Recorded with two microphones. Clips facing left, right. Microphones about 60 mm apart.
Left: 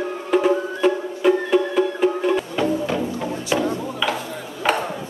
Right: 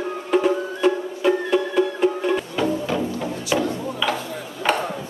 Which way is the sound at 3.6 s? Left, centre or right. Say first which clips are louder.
Left 1 dB; centre.